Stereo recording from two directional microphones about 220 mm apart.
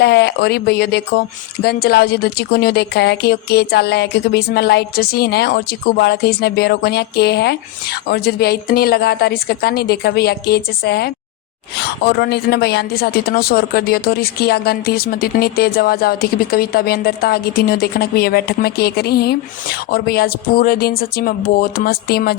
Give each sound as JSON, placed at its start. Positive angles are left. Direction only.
{"t": 0.0, "sound": "speech", "side_deg": 50}